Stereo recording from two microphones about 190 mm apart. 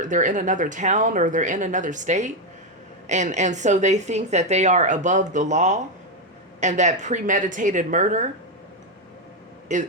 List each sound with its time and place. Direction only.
0.0 s a woman's voice: 40° right (ahead or behind)
9.7 s a woman's voice: 40° right (ahead or behind)